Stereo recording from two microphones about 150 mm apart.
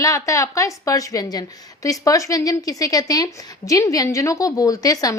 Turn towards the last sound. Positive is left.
turn(degrees=25)  # may be behind; listen again after turning